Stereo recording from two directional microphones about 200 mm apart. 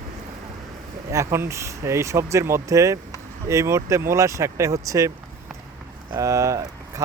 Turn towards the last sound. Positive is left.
turn(degrees=-15)  # may be behind; listen again after turning